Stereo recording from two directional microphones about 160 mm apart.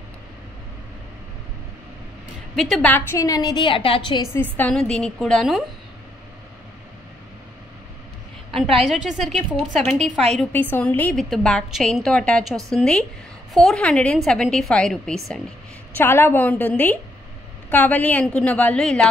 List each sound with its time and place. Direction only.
2.5 s a woman's voice: centre (ahead or behind)
2.9 s a woman's voice: 20° left (ahead or behind); by 4.2 s 35° left (ahead or behind)
4.6 s a woman's voice: 5° left (ahead or behind)
8.5 s a woman's voice: 35° right (ahead or behind)
8.8 s a woman's voice: 5° right (ahead or behind)
16.0 s a woman's voice: 15° left (ahead or behind)